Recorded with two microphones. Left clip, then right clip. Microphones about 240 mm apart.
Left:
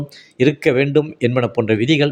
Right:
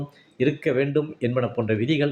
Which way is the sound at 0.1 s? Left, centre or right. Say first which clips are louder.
Left 7 dB; left.